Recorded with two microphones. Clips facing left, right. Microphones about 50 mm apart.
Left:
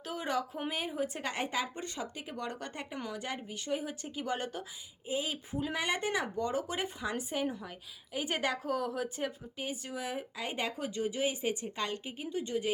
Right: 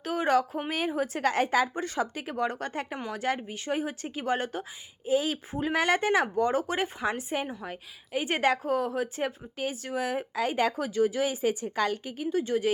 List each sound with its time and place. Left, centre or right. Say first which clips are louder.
0.0 s a sound: right 9 dB; right
0.7 s speech: right 7 dB; right
5.1 s speech: right 9 dB; right
5.5 s speech: right 8 dB; right
6.3 s speech: right 7 dB; right
9.6 s speech: right 8 dB; right